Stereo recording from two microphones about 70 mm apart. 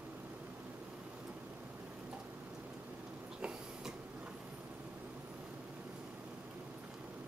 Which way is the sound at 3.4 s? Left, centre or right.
Centre.